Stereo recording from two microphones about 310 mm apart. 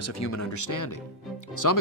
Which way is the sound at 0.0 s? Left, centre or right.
Left.